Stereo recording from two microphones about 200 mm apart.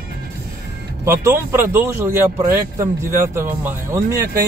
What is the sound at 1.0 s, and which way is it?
Speech, 15° right (ahead or behind).